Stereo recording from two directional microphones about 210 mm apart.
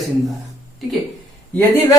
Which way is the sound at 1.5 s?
10° left (ahead or behind).